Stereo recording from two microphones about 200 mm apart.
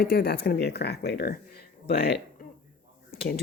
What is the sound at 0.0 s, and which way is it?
Speech, 50° left (ahead or behind).